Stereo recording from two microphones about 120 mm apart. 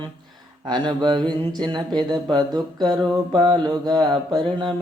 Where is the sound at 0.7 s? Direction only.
40° right (ahead or behind).